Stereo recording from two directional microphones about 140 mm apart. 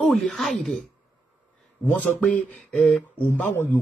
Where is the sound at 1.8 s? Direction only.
10° left (ahead or behind).